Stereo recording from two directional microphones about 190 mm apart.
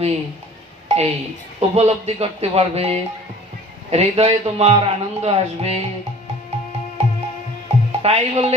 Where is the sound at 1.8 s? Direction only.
35° right (ahead or behind).